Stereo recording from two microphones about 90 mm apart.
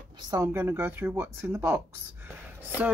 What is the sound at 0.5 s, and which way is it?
Speech, 25° right (ahead or behind).